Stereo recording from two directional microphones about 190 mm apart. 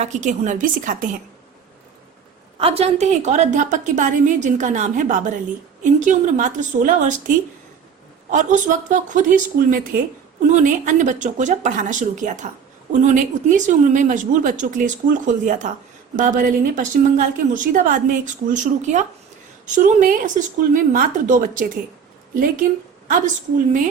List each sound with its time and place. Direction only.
0.0 s a woman's voice: 40° right (ahead or behind)
2.6 s a woman's voice: 30° right (ahead or behind)